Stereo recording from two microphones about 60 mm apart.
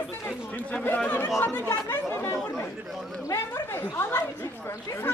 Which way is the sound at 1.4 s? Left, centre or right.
Left.